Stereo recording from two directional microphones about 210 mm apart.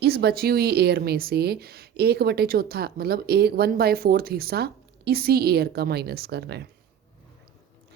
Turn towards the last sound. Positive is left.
turn(degrees=-50)  # may be behind; listen again after turning